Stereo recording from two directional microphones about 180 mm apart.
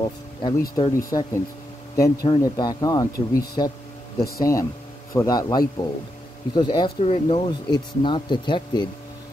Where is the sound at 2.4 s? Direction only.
20° left (ahead or behind).